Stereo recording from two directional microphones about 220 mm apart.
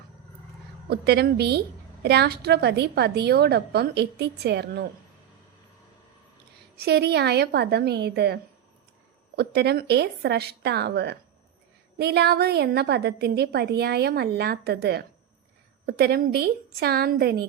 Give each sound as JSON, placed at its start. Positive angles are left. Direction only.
{"t": 0.9, "sound": "a woman's voice", "side_deg": -50}
{"t": 6.7, "sound": "a woman's voice", "side_deg": -45}